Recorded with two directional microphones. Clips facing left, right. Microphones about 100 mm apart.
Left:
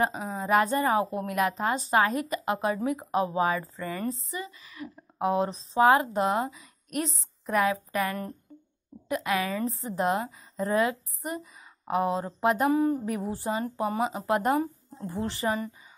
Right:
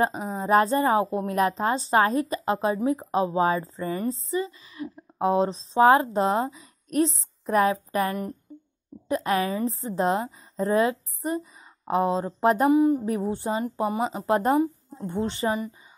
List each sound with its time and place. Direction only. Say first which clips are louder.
0.4 s a woman's voice: right 3 dB; 30° right (ahead or behind)
12.7 s music: right 5 dB; 15° right (ahead or behind)
13.0 s a woman's voice: right 4 dB; 30° right (ahead or behind)